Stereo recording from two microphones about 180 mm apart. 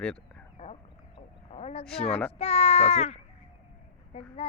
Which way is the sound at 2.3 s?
35° left (ahead or behind).